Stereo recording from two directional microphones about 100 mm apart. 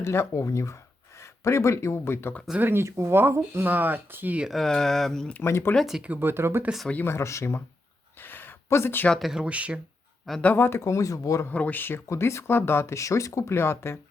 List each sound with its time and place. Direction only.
0.0 s speech: 25° left (ahead or behind)
2.6 s speech: 20° right (ahead or behind)
4.4 s speech: 5° left (ahead or behind)
5.4 s speech: 25° left (ahead or behind)
5.7 s speech: 5° right (ahead or behind)
6.1 s speech: 20° right (ahead or behind)
7.0 s speech: 25° left (ahead or behind)
8.2 s a sound: 20° left (ahead or behind)
9.0 s speech: centre (ahead or behind)
10.4 s speech: 20° left (ahead or behind); by 11.4 s 35° left (ahead or behind)
11.4 s speech: 15° left (ahead or behind)